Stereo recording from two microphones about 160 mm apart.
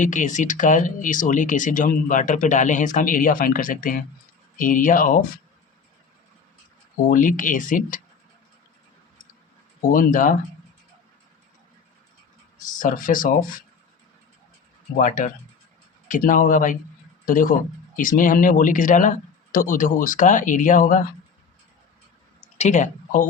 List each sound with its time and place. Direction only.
0.0 s speech: 50° left (ahead or behind)
7.1 s speech: 55° left (ahead or behind)
9.9 s speech: 60° left (ahead or behind)
12.6 s speech: 55° left (ahead or behind)
14.9 s speech: 55° left (ahead or behind)
22.5 s speech: 45° left (ahead or behind)